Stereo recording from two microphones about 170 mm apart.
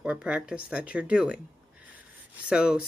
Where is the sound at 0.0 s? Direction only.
5° right (ahead or behind).